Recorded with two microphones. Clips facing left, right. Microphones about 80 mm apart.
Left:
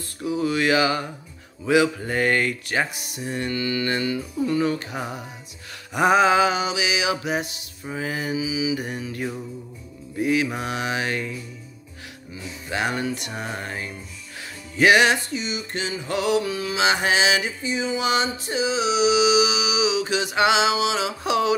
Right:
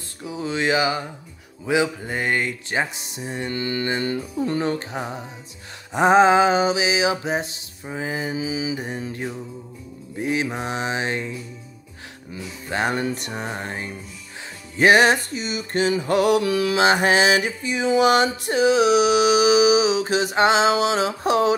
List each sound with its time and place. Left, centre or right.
0.2 s speech: right
3.5 s speech: right
4.5 s music: right
5.9 s music: right
7.8 s speech: right
8.4 s music: right
8.8 s speech: right
12.6 s music: right
13.5 s speech: right
14.8 s a sound: right
15.9 s mantra: right
16.8 s a sound: right